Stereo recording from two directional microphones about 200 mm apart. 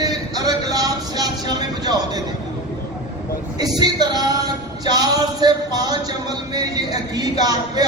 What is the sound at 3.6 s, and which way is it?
Music, 20° right (ahead or behind).